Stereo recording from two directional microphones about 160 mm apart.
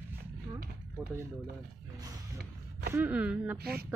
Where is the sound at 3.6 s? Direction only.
75° right (ahead or behind).